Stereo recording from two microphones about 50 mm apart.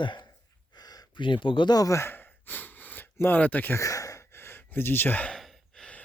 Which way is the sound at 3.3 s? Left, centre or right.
Left.